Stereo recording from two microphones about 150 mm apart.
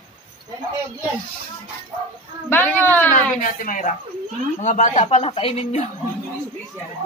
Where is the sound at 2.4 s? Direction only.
15° left (ahead or behind).